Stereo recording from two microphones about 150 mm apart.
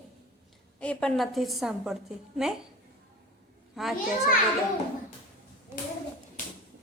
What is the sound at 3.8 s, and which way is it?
Speech, 5° right (ahead or behind).